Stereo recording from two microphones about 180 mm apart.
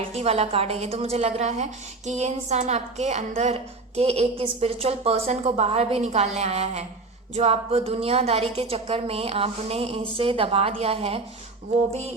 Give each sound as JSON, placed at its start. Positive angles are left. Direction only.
{"t": 0.0, "sound": "a woman's voice", "side_deg": -35}